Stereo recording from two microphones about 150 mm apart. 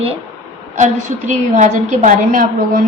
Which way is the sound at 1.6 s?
60° right (ahead or behind).